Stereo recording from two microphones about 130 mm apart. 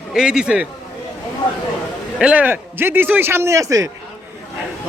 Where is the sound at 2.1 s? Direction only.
10° right (ahead or behind); by 3.9 s 25° right (ahead or behind).